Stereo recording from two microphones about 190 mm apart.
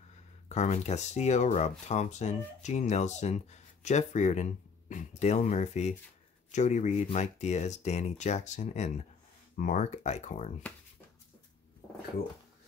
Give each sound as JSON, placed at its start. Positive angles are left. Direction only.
{"t": 0.5, "sound": "speech", "side_deg": 35}